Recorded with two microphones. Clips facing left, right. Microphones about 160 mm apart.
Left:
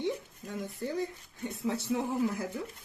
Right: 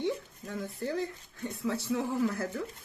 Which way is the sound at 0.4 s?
20° left (ahead or behind).